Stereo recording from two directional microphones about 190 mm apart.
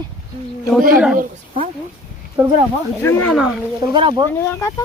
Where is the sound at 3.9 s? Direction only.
25° right (ahead or behind).